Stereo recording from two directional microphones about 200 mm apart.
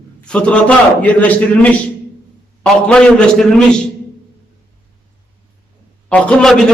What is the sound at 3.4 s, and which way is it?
Speech, 5° left (ahead or behind).